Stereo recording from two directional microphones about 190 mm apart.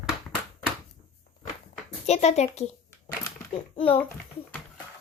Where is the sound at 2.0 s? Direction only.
35° left (ahead or behind).